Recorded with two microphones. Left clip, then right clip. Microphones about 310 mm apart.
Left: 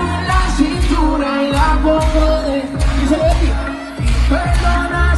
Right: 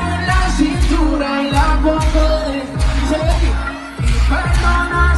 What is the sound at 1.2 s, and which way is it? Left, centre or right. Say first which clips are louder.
Music: left 1 dB; left.